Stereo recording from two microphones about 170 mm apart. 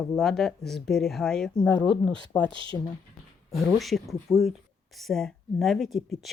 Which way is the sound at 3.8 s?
Centre (ahead or behind).